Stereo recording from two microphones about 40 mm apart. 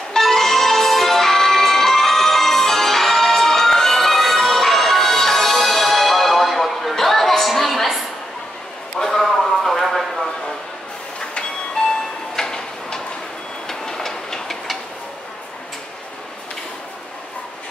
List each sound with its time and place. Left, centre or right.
0.1 s music: centre
9.0 s a sound: centre
11.8 s train: centre
12.4 s tick-tock: centre
13.7 s train: centre